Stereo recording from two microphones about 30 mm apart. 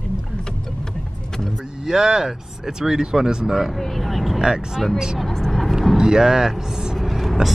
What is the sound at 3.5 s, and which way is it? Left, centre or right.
Vehicle, centre.